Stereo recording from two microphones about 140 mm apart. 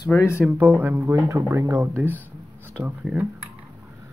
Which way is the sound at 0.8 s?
15° right (ahead or behind).